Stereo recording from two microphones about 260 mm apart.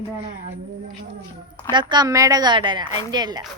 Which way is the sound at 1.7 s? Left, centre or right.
Centre.